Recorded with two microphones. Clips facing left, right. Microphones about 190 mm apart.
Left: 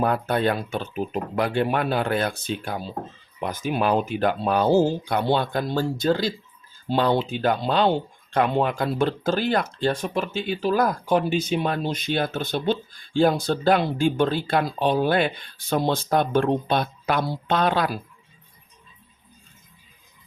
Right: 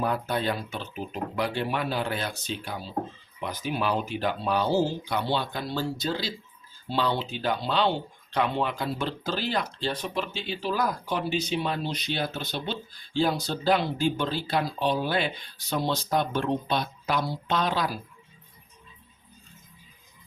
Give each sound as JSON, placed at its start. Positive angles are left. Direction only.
{"t": 0.0, "sound": "speech", "side_deg": 55}